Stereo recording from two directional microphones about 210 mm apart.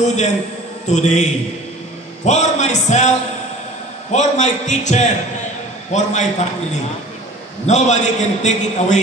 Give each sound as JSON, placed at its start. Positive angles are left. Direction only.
{"t": 0.0, "sound": "a man's voice", "side_deg": 35}
{"t": 7.6, "sound": "a man's voice", "side_deg": 35}